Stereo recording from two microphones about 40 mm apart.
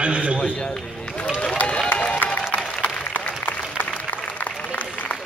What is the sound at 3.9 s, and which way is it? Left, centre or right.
Applause, left.